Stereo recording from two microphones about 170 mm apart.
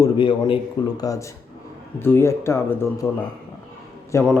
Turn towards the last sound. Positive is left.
turn(degrees=15)  # may be behind; listen again after turning